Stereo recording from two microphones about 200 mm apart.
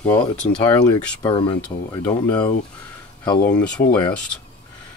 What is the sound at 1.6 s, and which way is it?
Speech, 5° left (ahead or behind).